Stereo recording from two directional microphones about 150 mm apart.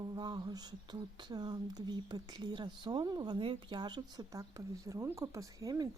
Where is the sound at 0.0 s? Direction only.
25° right (ahead or behind).